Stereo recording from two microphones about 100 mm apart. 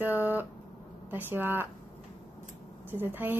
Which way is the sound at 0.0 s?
15° right (ahead or behind).